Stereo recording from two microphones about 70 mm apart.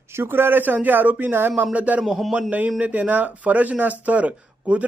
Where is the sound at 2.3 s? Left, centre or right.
Centre.